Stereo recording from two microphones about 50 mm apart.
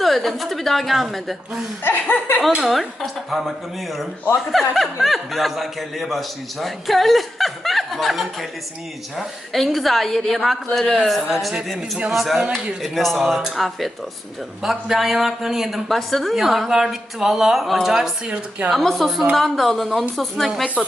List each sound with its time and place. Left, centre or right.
0.0 s speech: centre
1.8 s speech: left
2.6 s speech: centre
4.8 s speech: centre
12.4 s speech: right
12.8 s speech: centre